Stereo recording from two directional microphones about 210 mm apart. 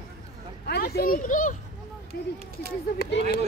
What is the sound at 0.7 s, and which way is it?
Speech, 50° left (ahead or behind).